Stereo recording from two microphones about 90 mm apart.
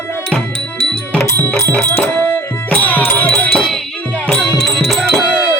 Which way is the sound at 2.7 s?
20° left (ahead or behind).